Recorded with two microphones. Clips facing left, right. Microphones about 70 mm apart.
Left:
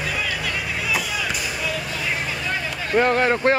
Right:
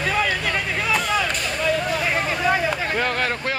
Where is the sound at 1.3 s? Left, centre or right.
Centre.